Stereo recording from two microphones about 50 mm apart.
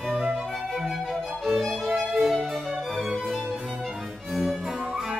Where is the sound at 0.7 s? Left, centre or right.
Centre.